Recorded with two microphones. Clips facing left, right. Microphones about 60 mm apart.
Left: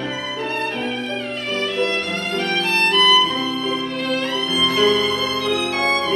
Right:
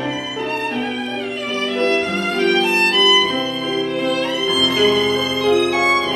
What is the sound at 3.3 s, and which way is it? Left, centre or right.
Music, right.